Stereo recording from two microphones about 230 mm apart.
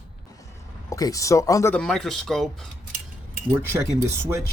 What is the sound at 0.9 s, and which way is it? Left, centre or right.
Speech, centre.